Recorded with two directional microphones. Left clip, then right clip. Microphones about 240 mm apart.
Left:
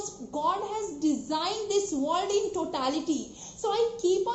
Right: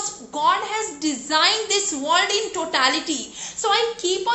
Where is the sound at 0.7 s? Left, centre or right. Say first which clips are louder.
Right 4 dB; centre.